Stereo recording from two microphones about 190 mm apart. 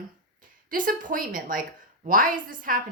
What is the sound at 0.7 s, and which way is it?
A woman's voice, 45° right (ahead or behind).